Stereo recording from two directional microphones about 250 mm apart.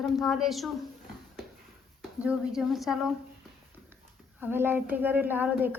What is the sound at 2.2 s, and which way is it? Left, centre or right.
Speech, centre.